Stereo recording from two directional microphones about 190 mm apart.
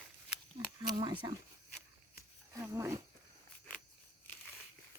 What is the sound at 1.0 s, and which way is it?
Speech, 20° right (ahead or behind).